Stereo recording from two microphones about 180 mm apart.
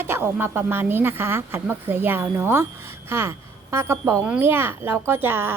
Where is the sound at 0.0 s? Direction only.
10° right (ahead or behind).